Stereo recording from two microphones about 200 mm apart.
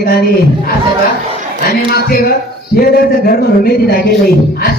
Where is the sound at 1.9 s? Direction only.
50° left (ahead or behind).